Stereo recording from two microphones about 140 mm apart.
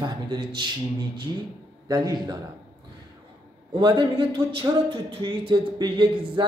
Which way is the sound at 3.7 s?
30° right (ahead or behind).